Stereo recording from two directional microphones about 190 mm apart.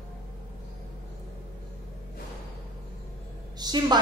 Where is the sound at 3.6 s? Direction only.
20° right (ahead or behind).